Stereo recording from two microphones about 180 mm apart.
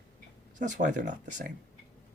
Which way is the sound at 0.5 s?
45° right (ahead or behind).